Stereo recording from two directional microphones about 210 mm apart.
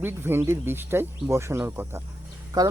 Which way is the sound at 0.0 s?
10° right (ahead or behind).